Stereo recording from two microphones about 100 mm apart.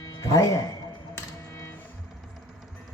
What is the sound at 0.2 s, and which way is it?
Speech, 35° left (ahead or behind).